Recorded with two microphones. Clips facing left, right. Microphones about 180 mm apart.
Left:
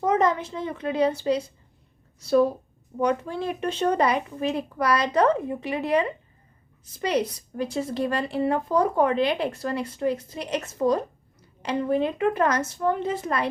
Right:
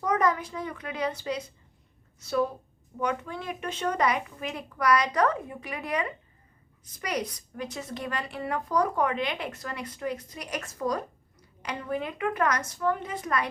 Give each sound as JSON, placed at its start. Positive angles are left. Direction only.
{"t": 0.0, "sound": "a woman's voice", "side_deg": 25}